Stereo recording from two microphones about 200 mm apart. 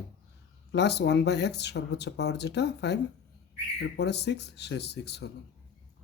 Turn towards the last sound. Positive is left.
turn(degrees=55)  # may be behind; listen again after turning